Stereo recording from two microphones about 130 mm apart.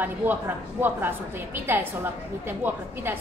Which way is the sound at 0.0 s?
15° right (ahead or behind).